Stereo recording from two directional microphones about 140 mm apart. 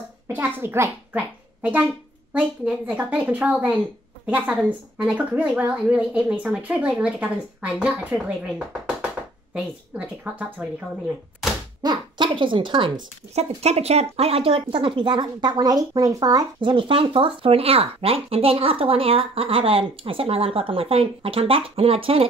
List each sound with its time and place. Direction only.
0.3 s a child's voice: 15° right (ahead or behind)
11.8 s speech: 30° right (ahead or behind)
12.9 s speech: 50° right (ahead or behind)